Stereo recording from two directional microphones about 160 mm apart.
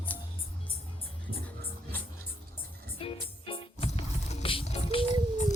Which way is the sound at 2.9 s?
35° left (ahead or behind).